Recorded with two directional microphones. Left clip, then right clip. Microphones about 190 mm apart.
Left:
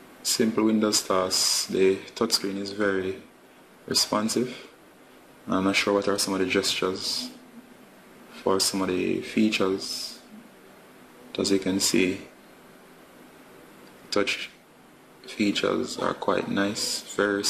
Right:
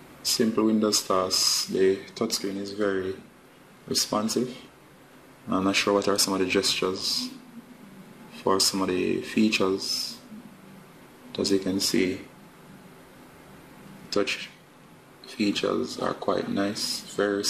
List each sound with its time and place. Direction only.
0.4 s speech: 5° left (ahead or behind)
5.5 s speech: 5° left (ahead or behind)
8.5 s speech: centre (ahead or behind)
11.3 s speech: 10° left (ahead or behind)
14.1 s speech: 10° left (ahead or behind)